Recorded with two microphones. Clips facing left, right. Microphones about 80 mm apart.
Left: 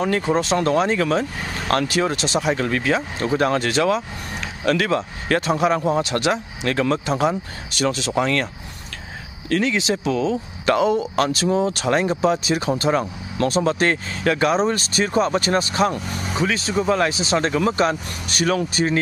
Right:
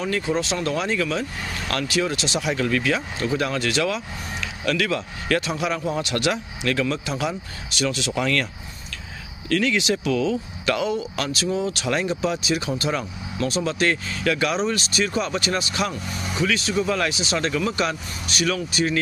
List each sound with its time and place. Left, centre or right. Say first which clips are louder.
0.0 s speech: left 4 dB; left
9.5 s speech: left 1 dB; left